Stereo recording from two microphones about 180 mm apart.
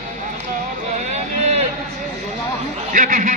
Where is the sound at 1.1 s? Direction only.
40° right (ahead or behind).